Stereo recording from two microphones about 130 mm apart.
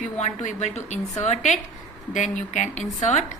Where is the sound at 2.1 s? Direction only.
70° left (ahead or behind).